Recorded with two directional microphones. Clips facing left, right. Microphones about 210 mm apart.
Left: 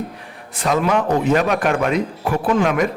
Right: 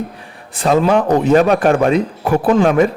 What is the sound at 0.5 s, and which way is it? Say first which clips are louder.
Speech: right 5 dB; 30° right (ahead or behind).